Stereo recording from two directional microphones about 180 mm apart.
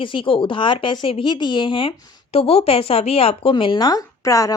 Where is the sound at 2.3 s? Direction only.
35° left (ahead or behind).